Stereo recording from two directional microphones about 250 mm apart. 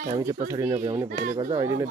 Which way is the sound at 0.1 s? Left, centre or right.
Centre.